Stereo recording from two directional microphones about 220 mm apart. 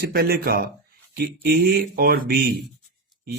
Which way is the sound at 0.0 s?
45° right (ahead or behind).